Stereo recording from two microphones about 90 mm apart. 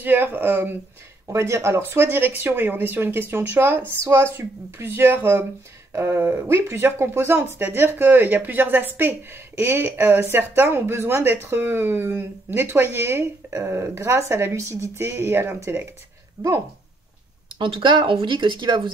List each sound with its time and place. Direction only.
0.0 s speech: 20° right (ahead or behind)
16.4 s speech: 45° right (ahead or behind)
17.6 s speech: 75° right (ahead or behind); by 18.8 s 60° right (ahead or behind)